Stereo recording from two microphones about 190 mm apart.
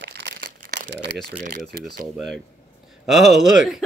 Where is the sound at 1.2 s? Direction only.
50° right (ahead or behind).